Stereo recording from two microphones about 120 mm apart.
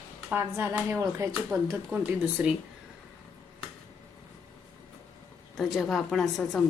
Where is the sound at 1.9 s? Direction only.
10° right (ahead or behind).